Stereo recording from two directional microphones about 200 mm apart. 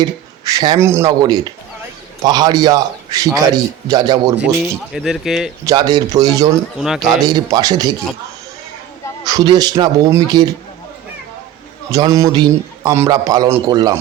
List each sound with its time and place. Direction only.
0.0 s a man's voice: 20° right (ahead or behind)
4.9 s speech: centre (ahead or behind)
5.6 s a man's voice: 20° right (ahead or behind)
6.7 s speech: centre (ahead or behind)
7.3 s a man's voice: 20° right (ahead or behind)
9.2 s a man's voice: 20° right (ahead or behind)
11.9 s a man's voice: 15° right (ahead or behind)